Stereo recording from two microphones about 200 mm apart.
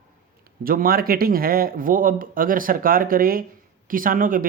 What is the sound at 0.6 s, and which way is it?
Speech, 45° right (ahead or behind).